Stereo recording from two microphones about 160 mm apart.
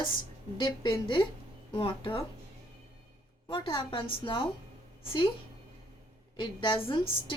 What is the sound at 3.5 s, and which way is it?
Speech, 30° left (ahead or behind).